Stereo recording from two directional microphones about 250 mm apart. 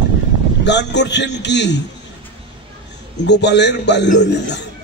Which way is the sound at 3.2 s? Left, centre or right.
Left.